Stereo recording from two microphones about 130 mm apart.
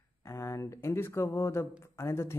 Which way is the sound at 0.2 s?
20° left (ahead or behind).